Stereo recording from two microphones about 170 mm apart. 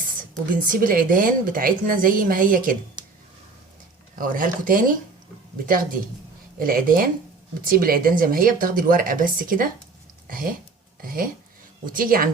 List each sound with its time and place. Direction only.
0.2 s a woman's voice: 55° right (ahead or behind)
3.0 s a sound: 25° right (ahead or behind)
4.1 s a woman's voice: 50° right (ahead or behind)